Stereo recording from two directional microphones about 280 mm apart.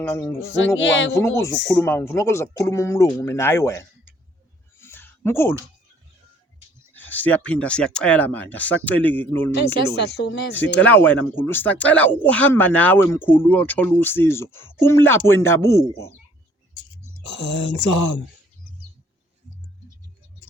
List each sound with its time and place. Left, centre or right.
0.0 s speech: centre
0.4 s a woman's voice: left
1.1 s speech: centre
4.8 s a sound: centre
6.9 s speech: centre
9.7 s a woman's voice: left
10.5 s speech: centre
17.2 s speech: left
17.5 s a woman's voice: left
17.8 s speech: left